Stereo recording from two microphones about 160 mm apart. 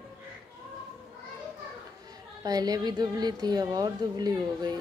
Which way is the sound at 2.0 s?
25° right (ahead or behind).